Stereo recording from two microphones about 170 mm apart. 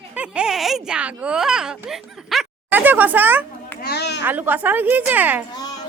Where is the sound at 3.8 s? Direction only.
70° left (ahead or behind).